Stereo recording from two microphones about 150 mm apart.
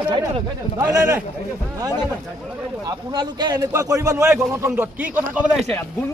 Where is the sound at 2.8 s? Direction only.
30° right (ahead or behind); by 5.5 s 10° right (ahead or behind).